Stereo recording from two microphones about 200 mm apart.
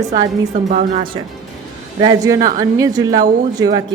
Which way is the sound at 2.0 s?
20° right (ahead or behind).